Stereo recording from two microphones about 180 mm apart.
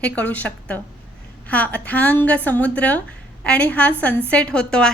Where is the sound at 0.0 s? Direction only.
10° left (ahead or behind).